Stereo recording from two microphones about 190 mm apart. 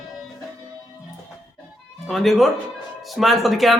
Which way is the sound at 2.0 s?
Centre (ahead or behind).